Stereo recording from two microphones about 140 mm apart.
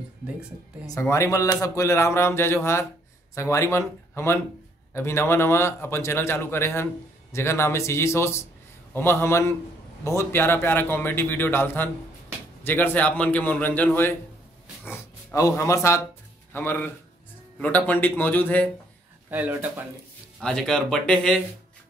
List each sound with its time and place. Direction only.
0.8 s a man's voice: 20° left (ahead or behind)
19.3 s speech: 10° right (ahead or behind)
20.3 s speech: 5° left (ahead or behind)